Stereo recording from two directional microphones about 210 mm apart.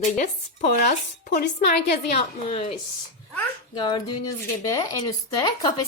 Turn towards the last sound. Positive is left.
turn(degrees=20)  # may be behind; listen again after turning